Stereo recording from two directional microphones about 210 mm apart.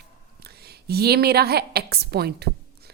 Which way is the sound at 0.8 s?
50° right (ahead or behind).